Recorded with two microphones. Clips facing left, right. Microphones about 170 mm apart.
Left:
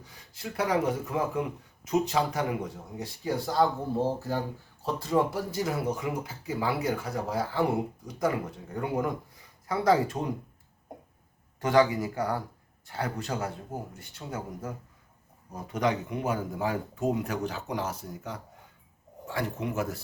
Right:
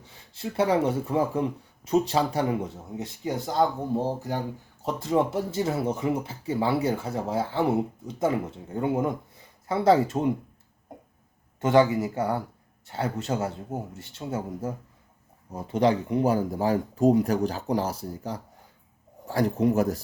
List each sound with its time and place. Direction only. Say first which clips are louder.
0.0 s speech: right 5 dB; 25° right (ahead or behind)
11.6 s speech: right 3 dB; 25° right (ahead or behind)